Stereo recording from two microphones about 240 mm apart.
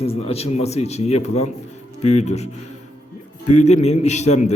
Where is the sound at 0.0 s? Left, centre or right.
Left.